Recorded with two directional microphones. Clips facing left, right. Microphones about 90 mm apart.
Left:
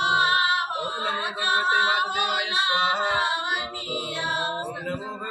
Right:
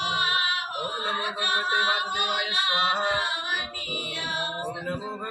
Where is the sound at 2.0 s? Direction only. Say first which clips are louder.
Left 3 dB; 20° left (ahead or behind).